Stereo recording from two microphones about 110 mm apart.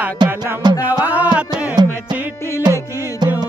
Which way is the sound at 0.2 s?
40° right (ahead or behind).